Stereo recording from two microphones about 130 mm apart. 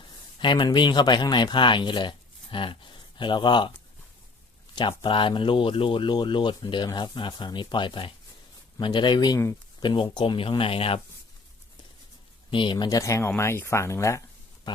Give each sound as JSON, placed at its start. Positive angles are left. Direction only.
{"t": 0.3, "sound": "speech", "side_deg": 35}
{"t": 4.7, "sound": "speech", "side_deg": 35}
{"t": 12.5, "sound": "speech", "side_deg": 40}